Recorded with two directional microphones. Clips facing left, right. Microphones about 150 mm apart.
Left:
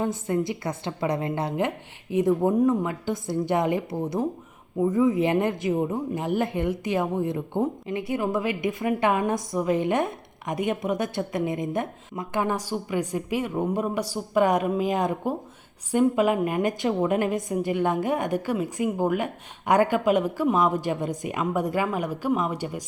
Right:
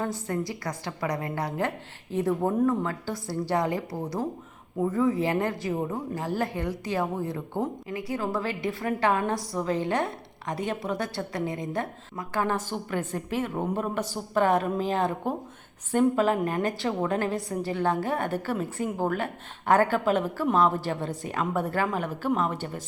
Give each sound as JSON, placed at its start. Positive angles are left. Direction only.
{"t": 0.0, "sound": "a woman's voice", "side_deg": 20}